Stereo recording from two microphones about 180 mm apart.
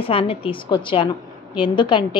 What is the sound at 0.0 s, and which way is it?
A woman's voice, 30° left (ahead or behind).